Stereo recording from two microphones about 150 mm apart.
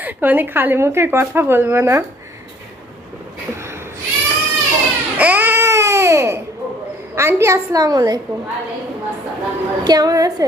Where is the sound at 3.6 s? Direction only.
15° right (ahead or behind).